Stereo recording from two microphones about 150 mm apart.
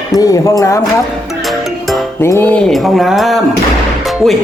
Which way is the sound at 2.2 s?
15° left (ahead or behind).